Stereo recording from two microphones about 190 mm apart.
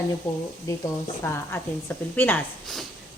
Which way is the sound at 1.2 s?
15° left (ahead or behind).